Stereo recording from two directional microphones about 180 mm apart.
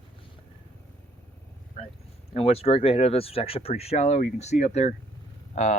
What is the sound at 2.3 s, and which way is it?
Speech, 35° left (ahead or behind).